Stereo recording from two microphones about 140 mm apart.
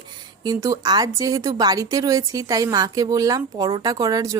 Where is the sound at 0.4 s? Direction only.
25° right (ahead or behind).